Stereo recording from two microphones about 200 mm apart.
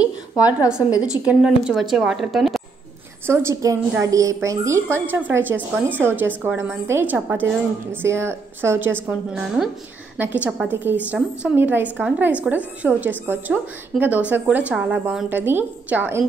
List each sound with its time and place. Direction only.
1.0 s a woman's voice: 5° right (ahead or behind)
3.3 s a woman's voice: 10° right (ahead or behind)